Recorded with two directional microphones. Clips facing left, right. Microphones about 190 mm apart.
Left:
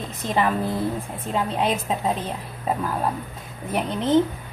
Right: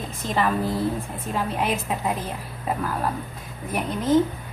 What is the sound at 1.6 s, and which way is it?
Speech, 25° left (ahead or behind).